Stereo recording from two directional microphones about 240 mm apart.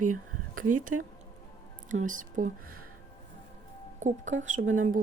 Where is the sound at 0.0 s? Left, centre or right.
Right.